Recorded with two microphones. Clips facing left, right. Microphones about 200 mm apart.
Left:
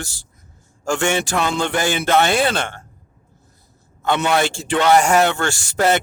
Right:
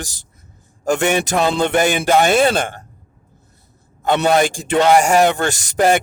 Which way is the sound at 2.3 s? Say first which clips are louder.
Right 4 dB; 45° right (ahead or behind).